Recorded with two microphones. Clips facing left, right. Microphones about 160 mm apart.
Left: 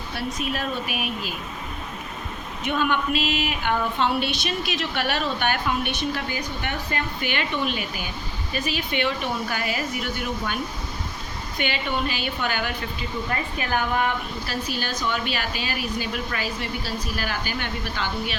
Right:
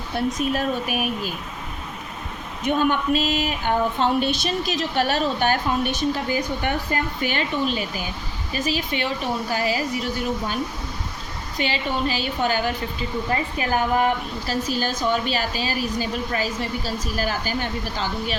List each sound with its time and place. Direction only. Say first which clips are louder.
0.4 s speech: right 4 dB; 45° right (ahead or behind)
2.6 s a woman's voice: right 3 dB; 40° right (ahead or behind)